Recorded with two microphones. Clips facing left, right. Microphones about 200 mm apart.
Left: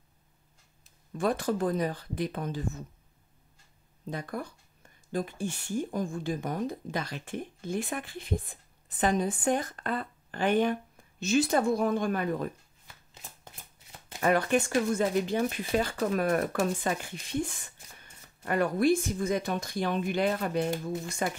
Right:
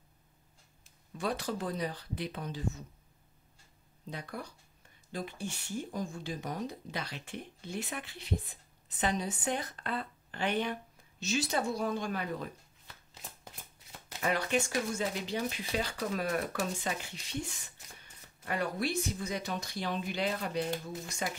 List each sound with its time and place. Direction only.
1.1 s a woman's voice: 50° left (ahead or behind)
4.1 s a woman's voice: 50° left (ahead or behind)
14.2 s a woman's voice: 50° left (ahead or behind)